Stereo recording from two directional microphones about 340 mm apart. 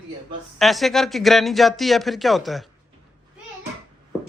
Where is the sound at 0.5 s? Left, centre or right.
Centre.